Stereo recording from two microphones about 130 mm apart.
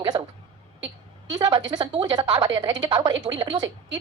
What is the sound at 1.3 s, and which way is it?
A woman's voice, 35° right (ahead or behind).